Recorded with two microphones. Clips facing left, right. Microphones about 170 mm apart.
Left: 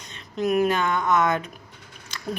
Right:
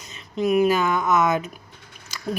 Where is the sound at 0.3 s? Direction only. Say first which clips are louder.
Right 3 dB; centre (ahead or behind).